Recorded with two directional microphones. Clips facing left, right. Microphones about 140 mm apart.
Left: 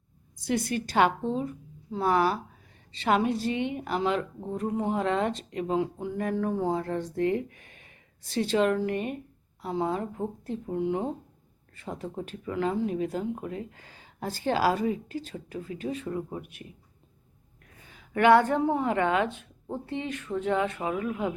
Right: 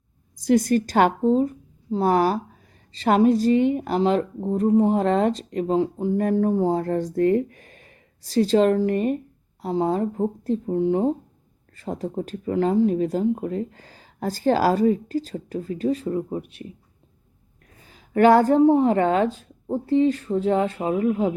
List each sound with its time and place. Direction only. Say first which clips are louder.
0.3 s a woman's voice: right 10 dB; 40° right (ahead or behind)
17.8 s a woman's voice: right 5 dB; 35° right (ahead or behind)